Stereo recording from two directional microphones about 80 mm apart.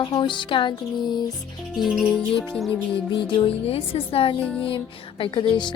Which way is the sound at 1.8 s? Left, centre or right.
Centre.